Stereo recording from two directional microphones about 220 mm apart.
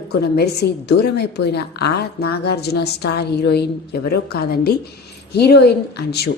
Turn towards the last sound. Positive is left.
turn(degrees=50)  # may be behind; listen again after turning